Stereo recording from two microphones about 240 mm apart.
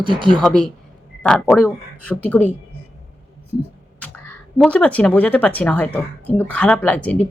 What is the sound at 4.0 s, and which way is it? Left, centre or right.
Speech, centre.